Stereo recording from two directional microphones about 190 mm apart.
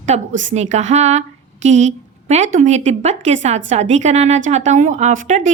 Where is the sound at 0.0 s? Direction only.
40° right (ahead or behind).